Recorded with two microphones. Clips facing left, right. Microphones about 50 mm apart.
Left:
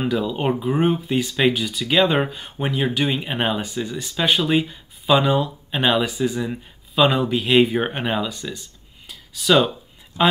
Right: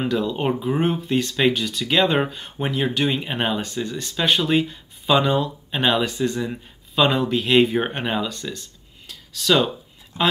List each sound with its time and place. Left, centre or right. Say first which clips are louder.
0.0 s speech: even; centre
10.1 s speech: left 3 dB; right